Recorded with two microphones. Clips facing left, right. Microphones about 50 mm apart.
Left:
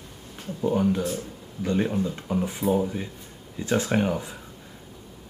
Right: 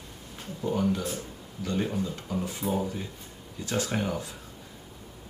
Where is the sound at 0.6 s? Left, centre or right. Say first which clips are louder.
Left 4 dB; centre.